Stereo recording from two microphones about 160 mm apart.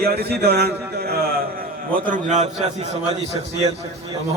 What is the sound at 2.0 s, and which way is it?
Speech, 50° right (ahead or behind).